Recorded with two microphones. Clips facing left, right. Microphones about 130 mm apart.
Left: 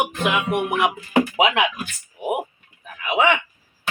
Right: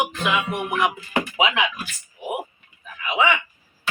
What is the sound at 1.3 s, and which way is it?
Speech, 55° left (ahead or behind).